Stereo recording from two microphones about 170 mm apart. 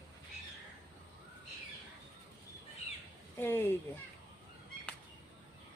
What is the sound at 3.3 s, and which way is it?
Speech, 15° left (ahead or behind).